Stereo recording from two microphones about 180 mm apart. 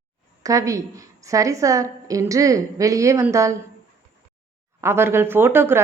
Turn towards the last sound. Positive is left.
turn(degrees=-10)  # may be behind; listen again after turning